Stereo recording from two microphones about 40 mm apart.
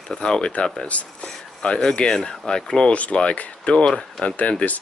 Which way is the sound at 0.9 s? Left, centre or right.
Left.